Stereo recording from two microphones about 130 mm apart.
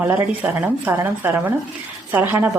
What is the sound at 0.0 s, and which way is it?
A woman's voice, 15° right (ahead or behind).